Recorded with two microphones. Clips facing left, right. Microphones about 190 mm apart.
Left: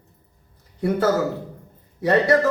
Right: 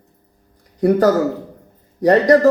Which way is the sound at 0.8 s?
40° right (ahead or behind).